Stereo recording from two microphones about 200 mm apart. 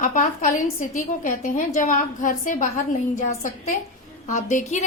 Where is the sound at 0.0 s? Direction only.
40° left (ahead or behind).